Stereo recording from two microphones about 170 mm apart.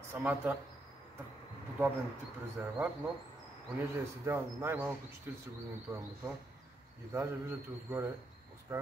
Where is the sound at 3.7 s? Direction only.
15° right (ahead or behind).